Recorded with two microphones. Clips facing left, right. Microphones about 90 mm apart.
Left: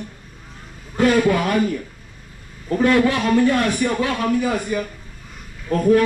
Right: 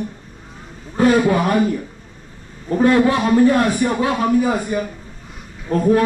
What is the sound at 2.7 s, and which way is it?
A man's voice, 25° right (ahead or behind).